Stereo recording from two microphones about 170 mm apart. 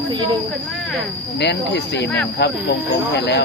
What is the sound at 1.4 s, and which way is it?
Speech, 85° left.